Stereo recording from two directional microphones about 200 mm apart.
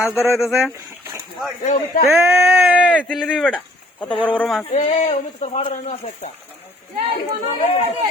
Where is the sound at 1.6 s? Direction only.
40° left (ahead or behind).